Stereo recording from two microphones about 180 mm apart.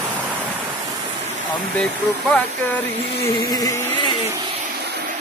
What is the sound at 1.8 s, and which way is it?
Speech, 5° left (ahead or behind).